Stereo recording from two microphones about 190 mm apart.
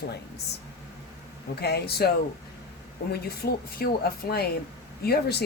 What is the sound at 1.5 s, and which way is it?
Speech, 60° left (ahead or behind).